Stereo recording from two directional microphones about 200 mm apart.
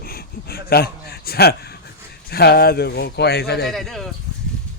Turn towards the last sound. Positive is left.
turn(degrees=0)  # may be behind; listen again after turning